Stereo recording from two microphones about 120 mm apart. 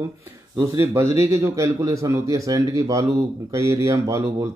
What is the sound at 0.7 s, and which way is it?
A man's voice, 25° right (ahead or behind).